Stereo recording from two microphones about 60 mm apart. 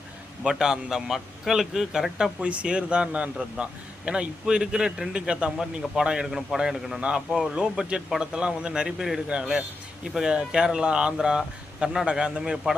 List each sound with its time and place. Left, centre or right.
0.4 s a man's voice: centre
2.4 s a man's voice: centre